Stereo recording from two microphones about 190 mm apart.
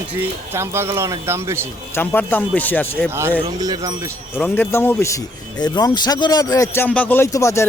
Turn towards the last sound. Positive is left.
turn(degrees=15)  # may be behind; listen again after turning